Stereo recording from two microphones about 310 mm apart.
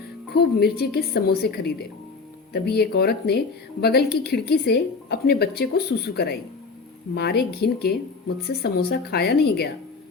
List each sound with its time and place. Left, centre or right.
0.3 s a woman's voice: left